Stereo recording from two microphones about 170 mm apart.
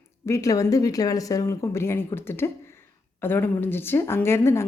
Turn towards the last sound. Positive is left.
turn(degrees=15)  # may be behind; listen again after turning